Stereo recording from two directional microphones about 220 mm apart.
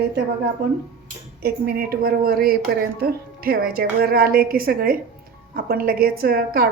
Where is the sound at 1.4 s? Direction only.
45° right (ahead or behind).